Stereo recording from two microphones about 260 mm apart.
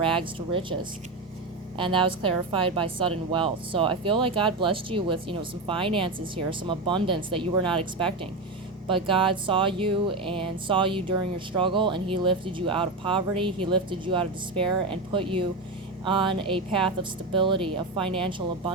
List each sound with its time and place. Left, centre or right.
0.0 s speech: centre
1.8 s speech: centre